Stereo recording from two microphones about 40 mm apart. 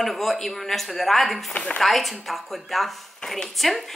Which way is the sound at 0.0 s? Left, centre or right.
Centre.